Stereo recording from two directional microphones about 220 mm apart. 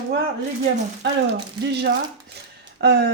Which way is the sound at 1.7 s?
50° right (ahead or behind).